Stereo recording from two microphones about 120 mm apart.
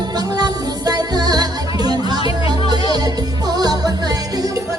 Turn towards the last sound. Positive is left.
turn(degrees=-35)  # may be behind; listen again after turning